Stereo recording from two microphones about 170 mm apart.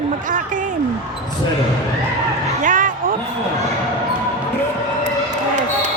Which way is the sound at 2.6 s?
50° right (ahead or behind).